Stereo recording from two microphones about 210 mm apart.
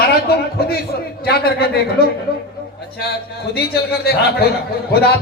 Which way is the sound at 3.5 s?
50° left (ahead or behind).